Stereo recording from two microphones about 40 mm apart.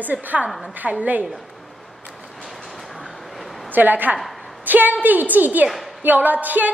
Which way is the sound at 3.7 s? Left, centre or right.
Right.